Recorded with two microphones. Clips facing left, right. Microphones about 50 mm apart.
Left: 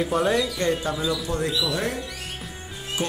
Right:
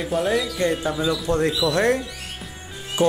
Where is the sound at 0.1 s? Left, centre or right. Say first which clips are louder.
Right 4 dB; centre.